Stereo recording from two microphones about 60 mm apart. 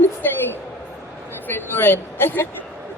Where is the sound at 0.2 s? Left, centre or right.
Left.